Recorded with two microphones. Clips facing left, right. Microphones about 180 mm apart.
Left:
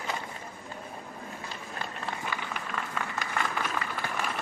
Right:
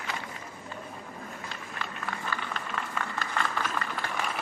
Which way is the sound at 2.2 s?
15° left (ahead or behind).